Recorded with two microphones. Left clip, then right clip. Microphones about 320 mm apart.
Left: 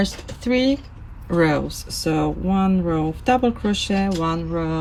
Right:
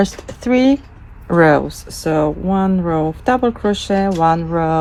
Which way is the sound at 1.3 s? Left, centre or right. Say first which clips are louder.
Right 7 dB; centre.